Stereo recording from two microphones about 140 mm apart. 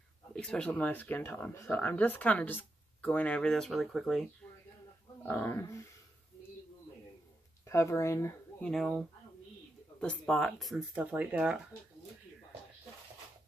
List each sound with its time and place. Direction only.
0.3 s speech: 5° left (ahead or behind)
5.2 s speech: 15° left (ahead or behind)
7.6 s speech: 20° left (ahead or behind)
8.6 s speech: centre (ahead or behind)
11.0 s speech: 10° right (ahead or behind)